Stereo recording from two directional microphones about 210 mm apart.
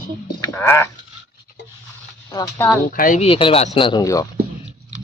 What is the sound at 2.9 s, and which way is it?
Speech, 40° left (ahead or behind).